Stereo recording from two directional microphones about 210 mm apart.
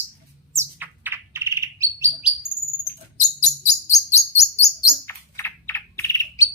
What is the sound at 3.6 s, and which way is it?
Chirp, 30° left (ahead or behind).